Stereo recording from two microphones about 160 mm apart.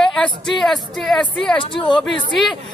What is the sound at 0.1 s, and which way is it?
A man's voice, 5° left (ahead or behind).